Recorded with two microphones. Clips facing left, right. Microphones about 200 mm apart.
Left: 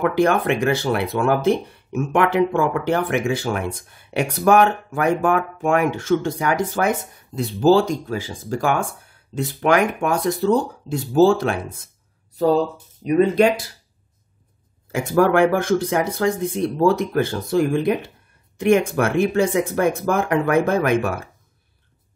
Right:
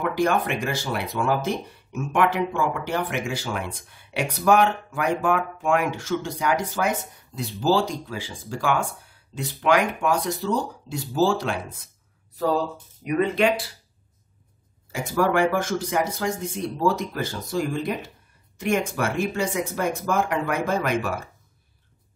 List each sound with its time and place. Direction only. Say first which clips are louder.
0.0 s speech: left 5 dB; 60° left (ahead or behind)
13.0 s speech: left 6 dB; 35° left (ahead or behind)
15.1 s speech: left 5 dB; 55° left (ahead or behind)